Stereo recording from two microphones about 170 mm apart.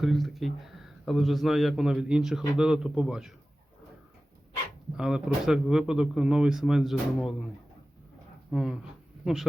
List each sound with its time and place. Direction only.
0.0 s speech: centre (ahead or behind)
4.9 s speech: 5° right (ahead or behind)
8.4 s speech: centre (ahead or behind)